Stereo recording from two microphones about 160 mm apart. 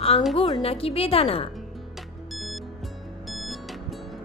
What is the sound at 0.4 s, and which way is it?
A woman's voice, 35° left (ahead or behind).